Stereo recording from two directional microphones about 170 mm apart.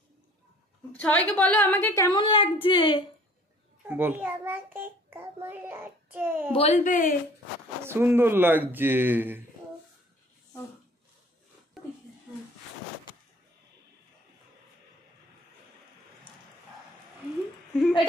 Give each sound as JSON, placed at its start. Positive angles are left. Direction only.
{"t": 0.9, "sound": "a woman's voice", "side_deg": 10}
{"t": 3.8, "sound": "a child's voice", "side_deg": -10}
{"t": 6.5, "sound": "speech", "side_deg": 40}
{"t": 7.8, "sound": "a child's voice", "side_deg": -15}